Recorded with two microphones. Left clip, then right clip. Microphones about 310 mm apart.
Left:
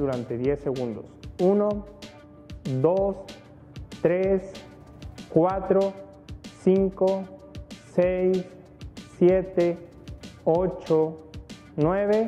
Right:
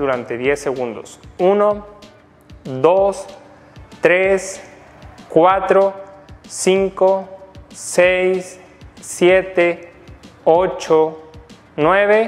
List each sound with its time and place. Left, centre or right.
0.2 s speech: centre
2.6 s speech: centre
2.9 s speech: centre